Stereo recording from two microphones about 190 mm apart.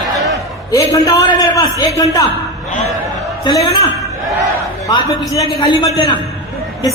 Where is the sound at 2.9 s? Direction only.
Centre (ahead or behind).